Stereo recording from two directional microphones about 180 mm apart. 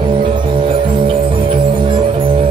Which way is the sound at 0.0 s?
30° right (ahead or behind).